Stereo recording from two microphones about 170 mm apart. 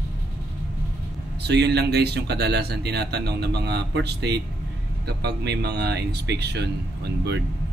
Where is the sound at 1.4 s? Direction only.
80° right.